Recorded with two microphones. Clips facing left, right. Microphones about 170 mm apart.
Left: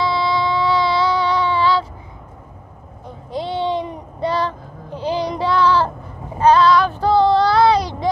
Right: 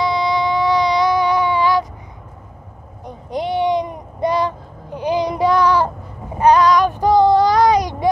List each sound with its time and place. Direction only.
0.0 s baby cry: 15° right (ahead or behind)
3.1 s a sound: 20° right (ahead or behind)
6.4 s child singing: 15° right (ahead or behind)